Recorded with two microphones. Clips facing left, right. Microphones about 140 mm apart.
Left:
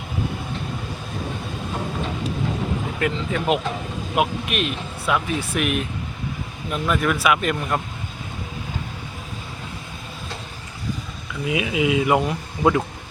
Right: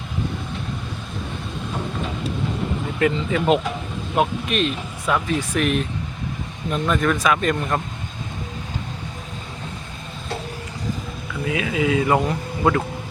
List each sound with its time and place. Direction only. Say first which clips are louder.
3.0 s speech: right 5 dB; centre (ahead or behind)
11.4 s speech: even; 15° left (ahead or behind)